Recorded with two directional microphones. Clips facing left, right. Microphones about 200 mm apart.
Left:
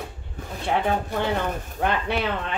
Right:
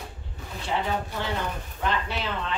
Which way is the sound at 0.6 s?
55° left (ahead or behind).